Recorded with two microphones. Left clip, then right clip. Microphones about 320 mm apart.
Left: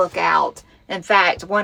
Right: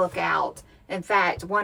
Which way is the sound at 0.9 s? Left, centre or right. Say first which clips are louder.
Left 7 dB; left.